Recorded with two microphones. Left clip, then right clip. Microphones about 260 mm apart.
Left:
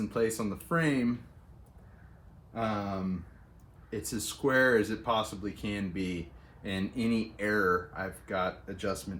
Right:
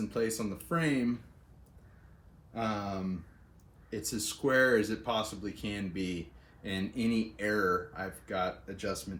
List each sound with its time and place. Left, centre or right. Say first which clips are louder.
0.1 s speech: left 3 dB; centre
2.5 s speech: left 2 dB; centre